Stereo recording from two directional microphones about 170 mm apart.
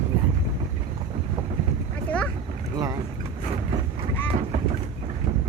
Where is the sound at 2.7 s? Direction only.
20° right (ahead or behind).